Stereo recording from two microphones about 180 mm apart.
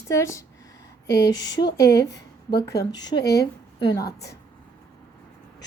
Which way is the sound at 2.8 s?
60° left (ahead or behind).